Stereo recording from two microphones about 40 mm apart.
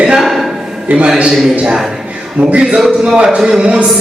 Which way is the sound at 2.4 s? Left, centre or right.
Right.